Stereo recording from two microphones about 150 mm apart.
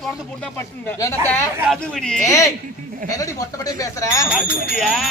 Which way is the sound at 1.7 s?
5° left (ahead or behind).